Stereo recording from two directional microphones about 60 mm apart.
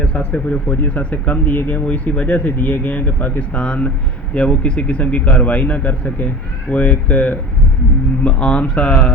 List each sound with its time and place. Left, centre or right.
0.0 s speech: left